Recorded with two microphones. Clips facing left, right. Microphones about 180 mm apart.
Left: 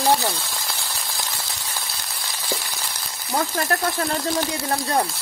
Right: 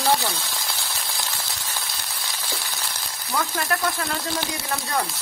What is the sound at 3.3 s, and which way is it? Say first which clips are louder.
Speech: left 3 dB; 35° left (ahead or behind).